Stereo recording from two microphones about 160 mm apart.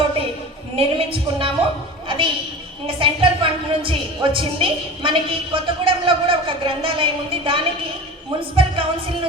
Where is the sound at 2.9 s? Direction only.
35° right (ahead or behind).